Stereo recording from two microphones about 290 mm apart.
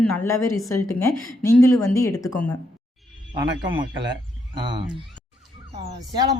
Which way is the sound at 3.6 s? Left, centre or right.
Centre.